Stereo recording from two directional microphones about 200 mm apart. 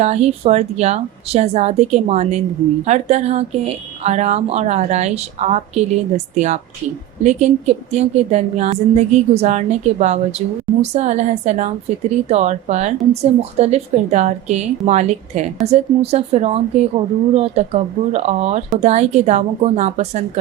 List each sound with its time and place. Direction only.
0.0 s a woman's voice: 35° right (ahead or behind)